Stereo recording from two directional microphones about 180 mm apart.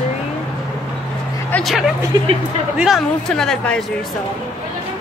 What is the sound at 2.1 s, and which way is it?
Speech, 20° right (ahead or behind).